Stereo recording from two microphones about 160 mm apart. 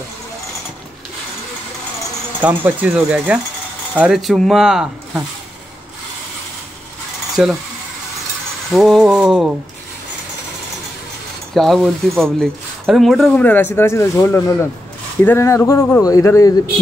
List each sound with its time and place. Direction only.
2.4 s speech: 10° right (ahead or behind)
7.4 s speech: centre (ahead or behind)
8.7 s speech: centre (ahead or behind)
11.5 s speech: centre (ahead or behind); by 16.5 s 20° left (ahead or behind)